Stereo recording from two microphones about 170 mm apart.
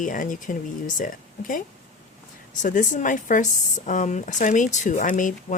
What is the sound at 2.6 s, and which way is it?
Speech, 50° left (ahead or behind).